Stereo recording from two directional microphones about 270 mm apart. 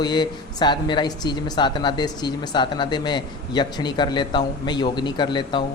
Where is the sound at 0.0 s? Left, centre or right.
Centre.